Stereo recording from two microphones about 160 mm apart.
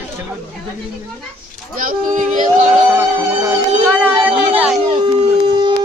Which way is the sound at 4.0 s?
10° right (ahead or behind).